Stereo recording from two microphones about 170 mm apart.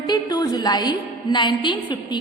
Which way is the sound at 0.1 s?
25° left (ahead or behind).